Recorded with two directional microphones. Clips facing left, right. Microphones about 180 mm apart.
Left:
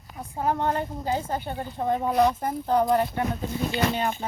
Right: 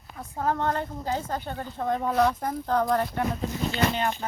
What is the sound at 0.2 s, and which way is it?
A woman's voice, 15° left (ahead or behind).